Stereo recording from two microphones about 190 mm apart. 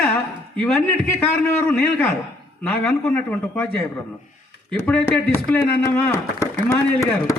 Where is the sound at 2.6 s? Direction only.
5° left (ahead or behind).